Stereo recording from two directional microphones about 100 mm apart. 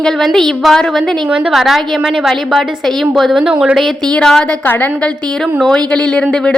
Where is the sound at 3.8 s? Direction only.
5° left (ahead or behind).